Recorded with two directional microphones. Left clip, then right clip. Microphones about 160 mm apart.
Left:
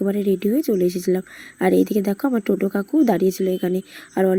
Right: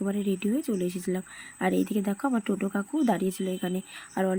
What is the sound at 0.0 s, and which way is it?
Speech, 25° left (ahead or behind).